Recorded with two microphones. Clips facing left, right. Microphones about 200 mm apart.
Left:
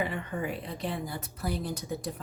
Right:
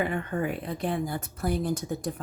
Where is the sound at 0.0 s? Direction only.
50° right (ahead or behind).